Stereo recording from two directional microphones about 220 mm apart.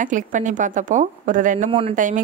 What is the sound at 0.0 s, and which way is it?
A woman's voice, 35° right (ahead or behind).